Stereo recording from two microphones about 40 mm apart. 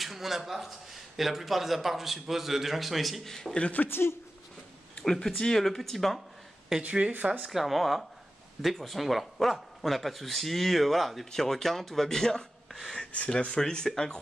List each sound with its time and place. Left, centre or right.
0.0 s speech: centre
3.3 s speech: centre
3.8 s speech: left
5.0 s speech: centre
6.8 s speech: right
7.5 s speech: centre
13.0 s a sound: left
13.3 s speech: centre